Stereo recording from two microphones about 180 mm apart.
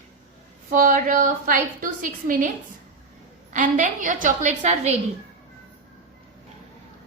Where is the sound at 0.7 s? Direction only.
50° right (ahead or behind).